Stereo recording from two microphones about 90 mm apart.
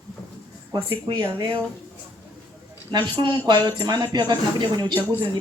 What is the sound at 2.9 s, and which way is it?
Speech, 50° right (ahead or behind).